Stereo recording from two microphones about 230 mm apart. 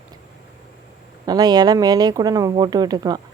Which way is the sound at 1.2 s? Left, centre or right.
Centre.